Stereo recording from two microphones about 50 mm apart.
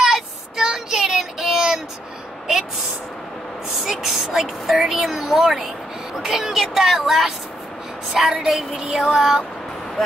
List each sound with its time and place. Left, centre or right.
0.0 s child singing: centre
3.8 s speech: centre
4.7 s speech: centre
6.1 s female singing: centre